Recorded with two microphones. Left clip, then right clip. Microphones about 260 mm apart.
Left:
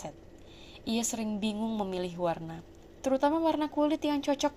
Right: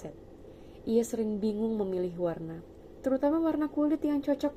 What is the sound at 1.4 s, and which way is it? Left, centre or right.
Speech, left.